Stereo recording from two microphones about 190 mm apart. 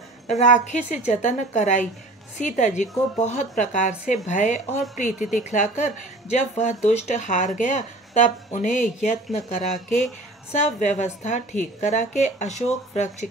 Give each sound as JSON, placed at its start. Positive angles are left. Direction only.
{"t": 0.3, "sound": "a woman's voice", "side_deg": 40}